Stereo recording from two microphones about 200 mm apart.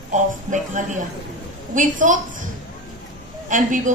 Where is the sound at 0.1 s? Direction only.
40° right (ahead or behind).